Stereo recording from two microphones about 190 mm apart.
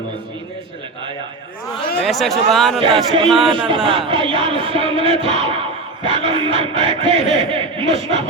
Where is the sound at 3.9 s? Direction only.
30° right (ahead or behind).